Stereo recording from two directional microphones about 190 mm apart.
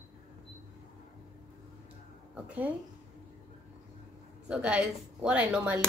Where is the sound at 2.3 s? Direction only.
5° right (ahead or behind).